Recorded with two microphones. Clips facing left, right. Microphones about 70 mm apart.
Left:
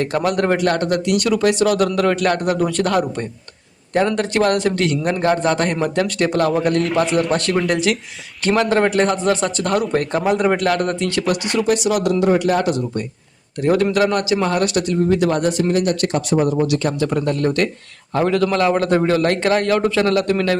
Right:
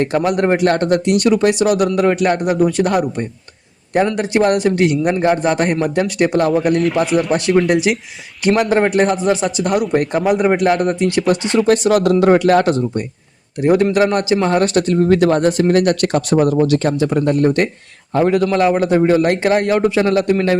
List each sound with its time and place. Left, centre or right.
0.0 s a man's voice: right
6.8 s a man's voice: centre
11.6 s speech: right
12.2 s a man's voice: right
12.7 s a man's voice: right
16.6 s speech: right
17.0 s a man's voice: right